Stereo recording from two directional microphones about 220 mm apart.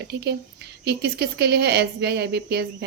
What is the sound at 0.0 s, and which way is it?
Speech, 50° right (ahead or behind).